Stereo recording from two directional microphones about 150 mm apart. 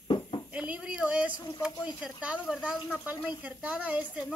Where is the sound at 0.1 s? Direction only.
30° left (ahead or behind).